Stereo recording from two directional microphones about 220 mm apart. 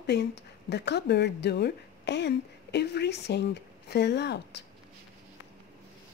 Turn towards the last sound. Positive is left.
turn(degrees=50)  # may be behind; listen again after turning